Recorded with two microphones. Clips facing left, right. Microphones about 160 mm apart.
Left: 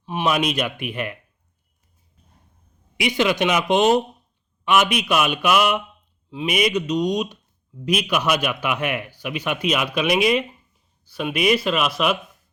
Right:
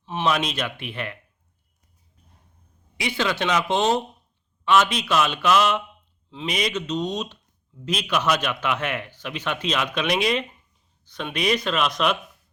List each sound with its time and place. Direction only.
0.0 s speech: 10° left (ahead or behind)
3.0 s a man's voice: 15° left (ahead or behind)